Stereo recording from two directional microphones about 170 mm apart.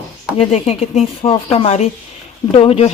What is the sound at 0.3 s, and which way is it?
Speech, 40° left (ahead or behind).